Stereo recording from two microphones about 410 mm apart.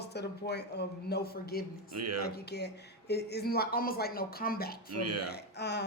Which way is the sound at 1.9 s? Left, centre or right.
Right.